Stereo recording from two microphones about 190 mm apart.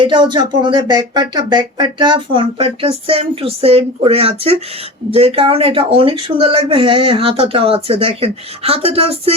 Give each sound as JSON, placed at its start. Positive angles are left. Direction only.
{"t": 0.0, "sound": "speech", "side_deg": -25}